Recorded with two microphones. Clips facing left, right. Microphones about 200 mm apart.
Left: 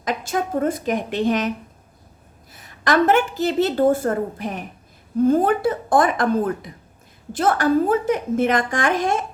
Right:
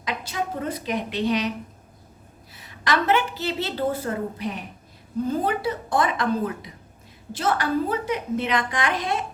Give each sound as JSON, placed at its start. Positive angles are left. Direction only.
{"t": 0.0, "sound": "a woman's voice", "side_deg": 45}
{"t": 2.5, "sound": "a woman's voice", "side_deg": 45}